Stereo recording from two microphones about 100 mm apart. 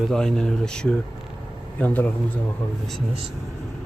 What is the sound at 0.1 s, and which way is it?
Speech, 5° left (ahead or behind).